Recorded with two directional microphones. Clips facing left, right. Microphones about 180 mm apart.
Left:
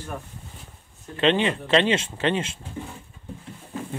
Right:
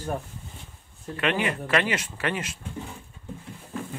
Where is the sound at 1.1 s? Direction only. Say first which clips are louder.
Left 5 dB; 25° left (ahead or behind).